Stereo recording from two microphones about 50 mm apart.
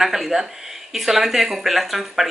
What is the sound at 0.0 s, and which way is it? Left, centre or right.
A woman's voice, centre.